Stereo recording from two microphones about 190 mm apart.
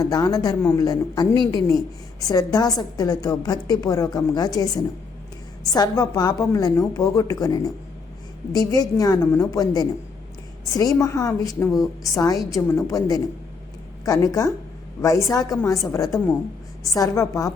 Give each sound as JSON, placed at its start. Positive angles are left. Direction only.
{"t": 0.0, "sound": "a woman's voice", "side_deg": 20}
{"t": 5.7, "sound": "a woman's voice", "side_deg": 20}